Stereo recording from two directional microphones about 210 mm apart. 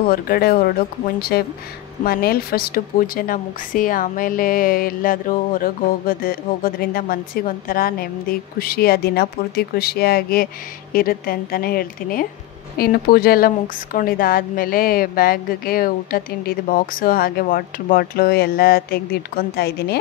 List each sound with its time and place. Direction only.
0.1 s a woman's voice: 45° left (ahead or behind)